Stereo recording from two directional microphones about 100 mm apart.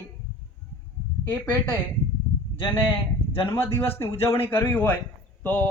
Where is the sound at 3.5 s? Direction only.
25° left (ahead or behind).